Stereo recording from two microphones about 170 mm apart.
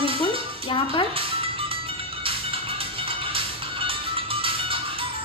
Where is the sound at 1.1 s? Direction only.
30° right (ahead or behind).